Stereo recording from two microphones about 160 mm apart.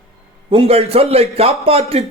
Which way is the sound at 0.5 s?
35° right (ahead or behind).